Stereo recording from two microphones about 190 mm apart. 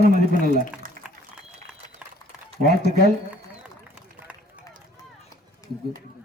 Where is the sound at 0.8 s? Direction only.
45° right (ahead or behind).